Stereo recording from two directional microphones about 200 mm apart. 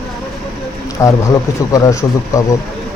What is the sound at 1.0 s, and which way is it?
Speech, 15° left (ahead or behind).